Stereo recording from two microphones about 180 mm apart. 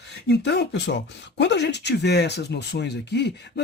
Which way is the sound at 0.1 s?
70° left (ahead or behind).